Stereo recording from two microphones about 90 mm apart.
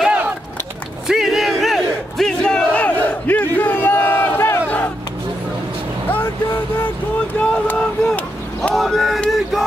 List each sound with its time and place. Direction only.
1.0 s battle cry: 5° right (ahead or behind); by 4.7 s 25° left (ahead or behind)
7.3 s boat: 15° left (ahead or behind)
8.7 s a sound: centre (ahead or behind)